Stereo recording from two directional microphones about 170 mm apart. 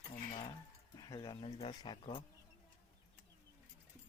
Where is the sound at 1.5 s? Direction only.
40° left (ahead or behind).